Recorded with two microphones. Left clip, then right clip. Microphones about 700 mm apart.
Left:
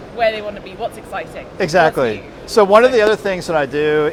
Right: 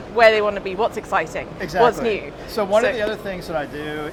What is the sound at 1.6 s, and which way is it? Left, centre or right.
Speech, left.